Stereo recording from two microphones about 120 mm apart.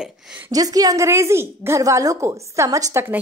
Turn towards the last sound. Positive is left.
turn(degrees=-20)  # may be behind; listen again after turning